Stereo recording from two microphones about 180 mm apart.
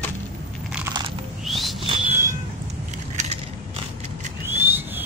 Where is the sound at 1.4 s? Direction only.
Centre (ahead or behind).